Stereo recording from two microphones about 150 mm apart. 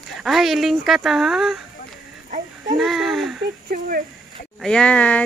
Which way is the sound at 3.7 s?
70° right (ahead or behind).